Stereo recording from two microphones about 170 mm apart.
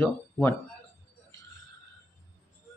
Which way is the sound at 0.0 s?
10° left (ahead or behind).